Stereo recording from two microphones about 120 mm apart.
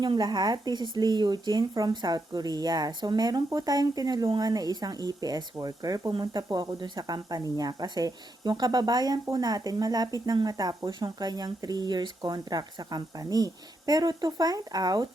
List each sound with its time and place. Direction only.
0.0 s speech: 35° right (ahead or behind)